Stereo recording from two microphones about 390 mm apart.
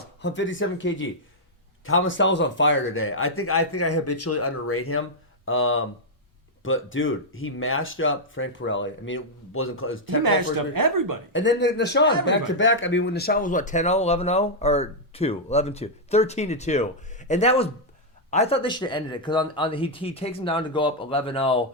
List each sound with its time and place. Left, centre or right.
0.2 s speech: left
10.2 s a woman's voice: right
11.3 s speech: left